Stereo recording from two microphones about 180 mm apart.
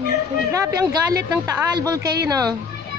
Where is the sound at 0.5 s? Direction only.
20° right (ahead or behind).